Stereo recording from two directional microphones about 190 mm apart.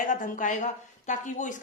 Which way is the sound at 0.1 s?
45° left (ahead or behind).